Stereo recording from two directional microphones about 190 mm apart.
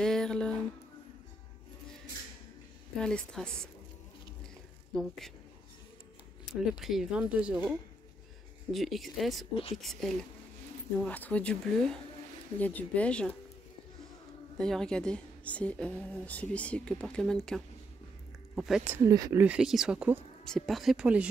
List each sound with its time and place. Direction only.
0.0 s music: centre (ahead or behind)
3.0 s a woman's voice: 5° left (ahead or behind)
6.8 s a woman's voice: centre (ahead or behind)
8.7 s a woman's voice: centre (ahead or behind)
14.6 s a woman's voice: 5° left (ahead or behind)
18.9 s speech: 20° right (ahead or behind)
19.4 s a woman's voice: 5° right (ahead or behind)